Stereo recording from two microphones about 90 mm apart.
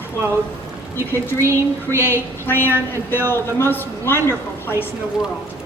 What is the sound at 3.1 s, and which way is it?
A man's voice, 25° left (ahead or behind).